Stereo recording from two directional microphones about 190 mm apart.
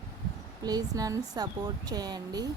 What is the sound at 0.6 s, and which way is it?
Speech, 20° right (ahead or behind).